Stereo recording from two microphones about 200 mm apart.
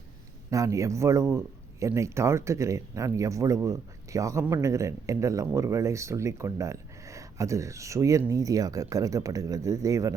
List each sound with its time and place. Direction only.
0.5 s speech: 15° right (ahead or behind)